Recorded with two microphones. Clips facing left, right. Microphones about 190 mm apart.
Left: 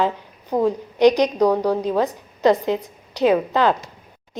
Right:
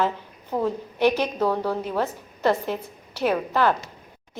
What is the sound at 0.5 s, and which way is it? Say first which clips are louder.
A woman's voice: left 5 dB; 15° left (ahead or behind).